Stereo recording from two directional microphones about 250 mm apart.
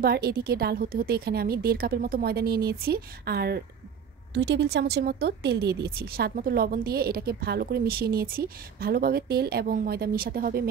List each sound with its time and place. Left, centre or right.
0.0 s speech: right